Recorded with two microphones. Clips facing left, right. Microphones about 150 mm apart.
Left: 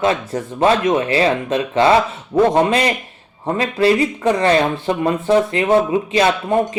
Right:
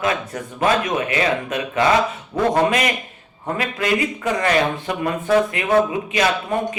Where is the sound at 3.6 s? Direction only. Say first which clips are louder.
Left 6 dB; 35° left (ahead or behind).